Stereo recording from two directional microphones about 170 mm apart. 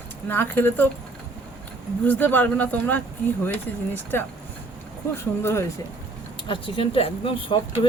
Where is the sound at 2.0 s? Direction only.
10° left (ahead or behind).